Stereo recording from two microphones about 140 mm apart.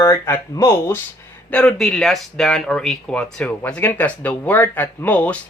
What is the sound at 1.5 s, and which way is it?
Speech, 5° left (ahead or behind).